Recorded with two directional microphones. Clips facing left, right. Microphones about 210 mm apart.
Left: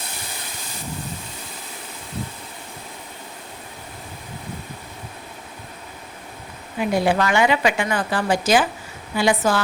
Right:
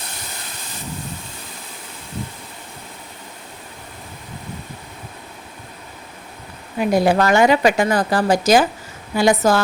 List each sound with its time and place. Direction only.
6.7 s a woman's voice: 40° right (ahead or behind)